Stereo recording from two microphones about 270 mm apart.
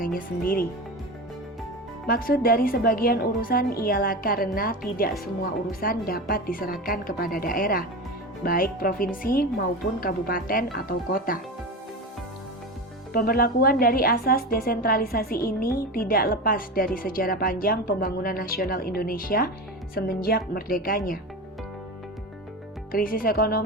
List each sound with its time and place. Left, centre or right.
0.0 s speech: left
2.0 s a woman's voice: left
13.1 s a woman's voice: left
22.9 s a woman's voice: left